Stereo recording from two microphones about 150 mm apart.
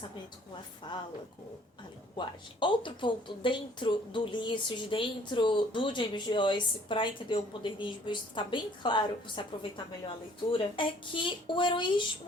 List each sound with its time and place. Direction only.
0.9 s a woman's voice: 30° left (ahead or behind)
2.1 s a woman's voice: 35° left (ahead or behind)